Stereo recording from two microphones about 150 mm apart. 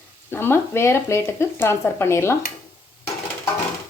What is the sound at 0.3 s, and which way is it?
Speech, 15° left (ahead or behind).